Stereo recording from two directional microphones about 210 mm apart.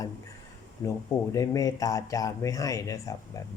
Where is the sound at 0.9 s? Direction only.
15° left (ahead or behind).